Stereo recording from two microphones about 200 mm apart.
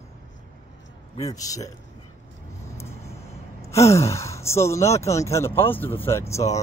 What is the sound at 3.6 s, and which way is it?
Speech, 15° left (ahead or behind).